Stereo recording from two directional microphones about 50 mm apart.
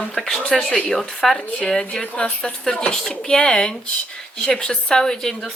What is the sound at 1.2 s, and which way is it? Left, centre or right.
Speech, centre.